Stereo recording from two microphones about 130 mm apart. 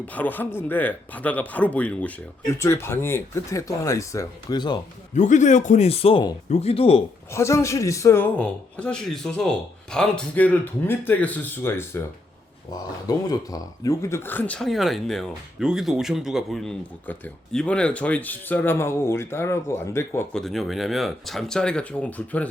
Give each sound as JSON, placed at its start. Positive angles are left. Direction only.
{"t": 0.1, "sound": "a man's voice", "side_deg": 15}
{"t": 5.1, "sound": "a man's voice", "side_deg": 70}
{"t": 7.3, "sound": "a man's voice", "side_deg": 20}
{"t": 12.7, "sound": "speech", "side_deg": 30}
{"t": 14.7, "sound": "a man's voice", "side_deg": 0}
{"t": 20.3, "sound": "speech", "side_deg": 0}